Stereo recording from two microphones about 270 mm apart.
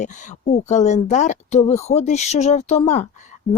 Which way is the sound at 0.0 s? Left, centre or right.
Left.